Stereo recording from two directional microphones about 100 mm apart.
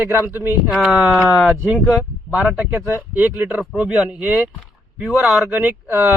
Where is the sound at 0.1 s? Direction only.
20° right (ahead or behind).